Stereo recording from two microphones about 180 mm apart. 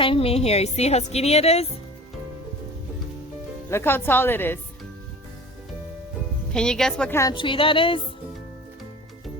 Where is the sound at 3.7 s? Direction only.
15° left (ahead or behind).